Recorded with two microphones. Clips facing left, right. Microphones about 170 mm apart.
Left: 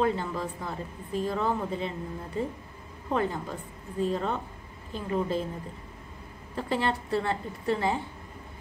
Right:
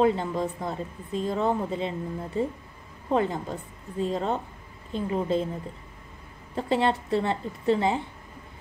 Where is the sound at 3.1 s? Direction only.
25° right (ahead or behind).